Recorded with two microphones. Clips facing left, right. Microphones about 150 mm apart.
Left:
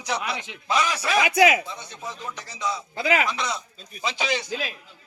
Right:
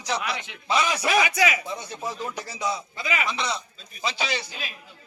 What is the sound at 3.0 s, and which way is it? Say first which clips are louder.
Speech: left 11 dB; 65° left (ahead or behind).